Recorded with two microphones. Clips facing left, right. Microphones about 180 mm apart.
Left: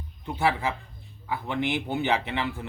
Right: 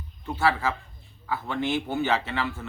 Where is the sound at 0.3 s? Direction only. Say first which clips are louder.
Right 1 dB; 15° left (ahead or behind).